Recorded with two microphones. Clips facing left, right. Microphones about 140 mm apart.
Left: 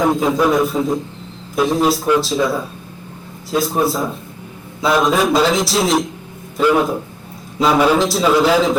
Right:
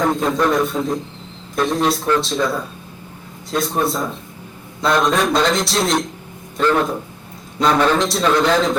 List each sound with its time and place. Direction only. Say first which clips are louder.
0.0 s a man's voice: left 2 dB; centre (ahead or behind)